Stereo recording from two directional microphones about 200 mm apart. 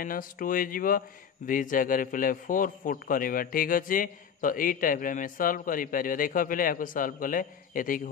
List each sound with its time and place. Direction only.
0.0 s a man's voice: 45° left (ahead or behind)